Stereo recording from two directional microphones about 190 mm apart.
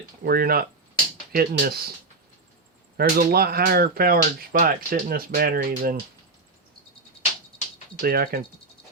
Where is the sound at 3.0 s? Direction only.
50° right (ahead or behind).